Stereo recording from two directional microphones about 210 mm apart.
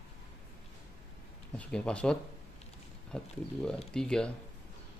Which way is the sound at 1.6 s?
5° left (ahead or behind).